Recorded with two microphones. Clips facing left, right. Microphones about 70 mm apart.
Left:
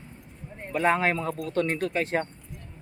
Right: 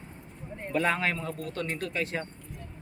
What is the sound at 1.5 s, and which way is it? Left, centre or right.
Speech, left.